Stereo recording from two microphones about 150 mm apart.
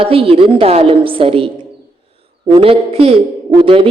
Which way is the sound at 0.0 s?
40° right (ahead or behind).